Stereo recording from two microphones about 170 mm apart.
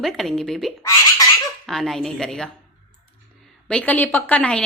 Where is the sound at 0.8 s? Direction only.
20° left (ahead or behind).